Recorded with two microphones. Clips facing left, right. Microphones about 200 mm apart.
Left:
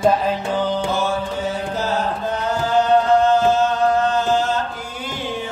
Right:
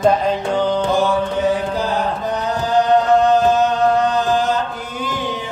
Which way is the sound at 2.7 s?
15° right (ahead or behind).